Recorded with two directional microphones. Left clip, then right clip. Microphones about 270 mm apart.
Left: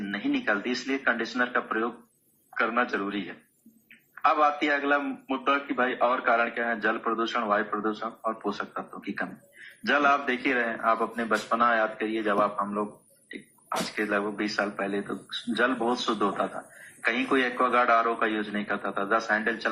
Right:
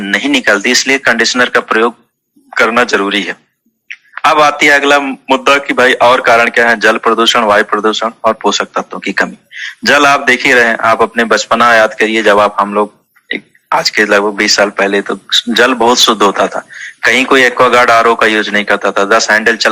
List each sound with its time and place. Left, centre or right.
0.0 s a man's voice: right